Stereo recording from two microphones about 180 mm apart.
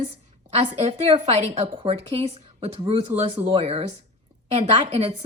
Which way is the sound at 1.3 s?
35° right (ahead or behind).